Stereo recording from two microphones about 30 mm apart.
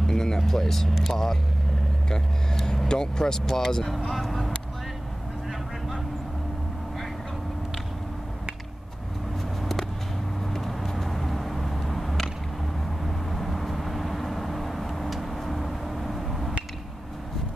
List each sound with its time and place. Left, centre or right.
0.0 s vehicle: centre
0.5 s speech: centre
2.9 s speech: left
4.1 s speech: centre
10.5 s vehicle: centre